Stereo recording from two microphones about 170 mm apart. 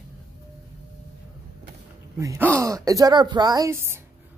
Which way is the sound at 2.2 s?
20° right (ahead or behind).